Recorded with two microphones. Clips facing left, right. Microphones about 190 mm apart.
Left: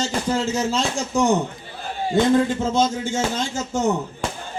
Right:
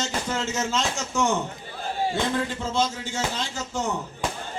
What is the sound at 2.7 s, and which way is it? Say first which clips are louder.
A man's voice: left 3 dB; 45° left (ahead or behind).